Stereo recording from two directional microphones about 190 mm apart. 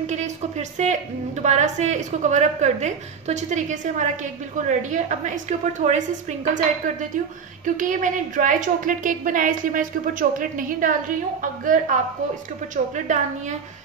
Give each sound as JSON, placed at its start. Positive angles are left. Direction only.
{"t": 0.0, "sound": "a woman's voice", "side_deg": -35}